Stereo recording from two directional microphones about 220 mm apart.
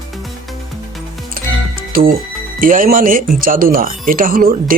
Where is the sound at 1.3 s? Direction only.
40° right (ahead or behind).